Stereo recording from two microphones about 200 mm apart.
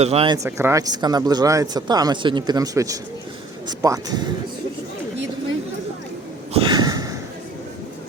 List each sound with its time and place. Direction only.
0.0 s speech: 30° right (ahead or behind)
0.3 s speech: 15° right (ahead or behind)
6.5 s a sound: 25° right (ahead or behind)